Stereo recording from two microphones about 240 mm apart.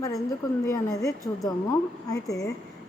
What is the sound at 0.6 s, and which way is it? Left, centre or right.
A woman's voice, centre.